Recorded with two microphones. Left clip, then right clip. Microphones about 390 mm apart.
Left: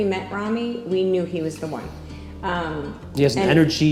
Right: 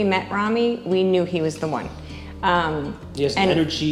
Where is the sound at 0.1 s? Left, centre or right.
Centre.